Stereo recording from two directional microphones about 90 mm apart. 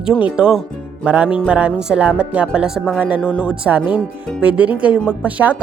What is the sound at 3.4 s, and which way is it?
Speech, 10° right (ahead or behind).